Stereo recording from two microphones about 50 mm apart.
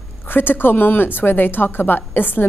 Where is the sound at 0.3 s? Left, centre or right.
Left.